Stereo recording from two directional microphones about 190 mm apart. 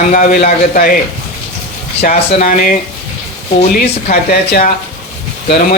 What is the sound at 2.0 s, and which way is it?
Speech, 50° left (ahead or behind).